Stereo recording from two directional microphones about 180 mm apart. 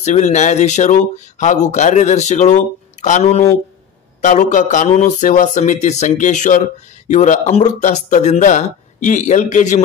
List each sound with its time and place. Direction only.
0.0 s speech: 40° left (ahead or behind)